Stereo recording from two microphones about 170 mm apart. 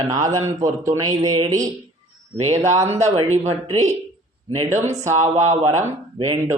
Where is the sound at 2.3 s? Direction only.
40° right (ahead or behind).